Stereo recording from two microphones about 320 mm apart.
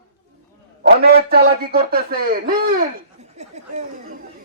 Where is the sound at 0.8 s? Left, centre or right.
Right.